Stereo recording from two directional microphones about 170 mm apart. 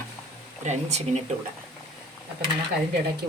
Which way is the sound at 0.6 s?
40° right (ahead or behind).